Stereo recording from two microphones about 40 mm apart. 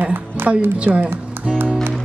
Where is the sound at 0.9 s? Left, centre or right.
Right.